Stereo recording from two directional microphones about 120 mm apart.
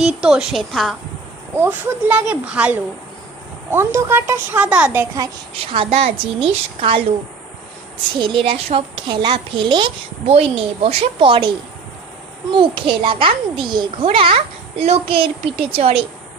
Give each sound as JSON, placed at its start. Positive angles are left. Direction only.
{"t": 0.0, "sound": "a woman's voice", "side_deg": -5}
{"t": 1.5, "sound": "a woman's voice", "side_deg": -15}
{"t": 5.5, "sound": "a child's voice", "side_deg": -50}
{"t": 8.2, "sound": "a child's voice", "side_deg": -45}
{"t": 9.0, "sound": "a child's voice", "side_deg": -45}
{"t": 10.2, "sound": "a child's voice", "side_deg": -60}